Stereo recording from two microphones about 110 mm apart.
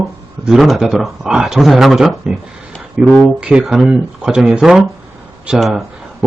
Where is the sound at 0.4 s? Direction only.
Centre (ahead or behind).